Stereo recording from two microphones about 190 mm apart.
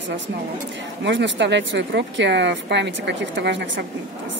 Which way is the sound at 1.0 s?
70° right (ahead or behind).